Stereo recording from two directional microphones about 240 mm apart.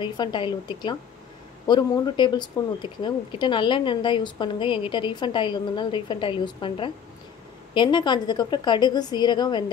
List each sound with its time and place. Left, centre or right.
0.0 s speech: centre